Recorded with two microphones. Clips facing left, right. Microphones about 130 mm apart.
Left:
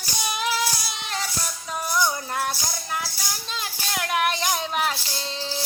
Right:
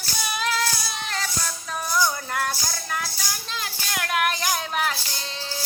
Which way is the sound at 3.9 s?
20° left (ahead or behind).